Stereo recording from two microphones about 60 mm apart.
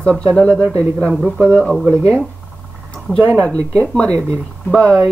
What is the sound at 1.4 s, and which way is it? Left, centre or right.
Speech, centre.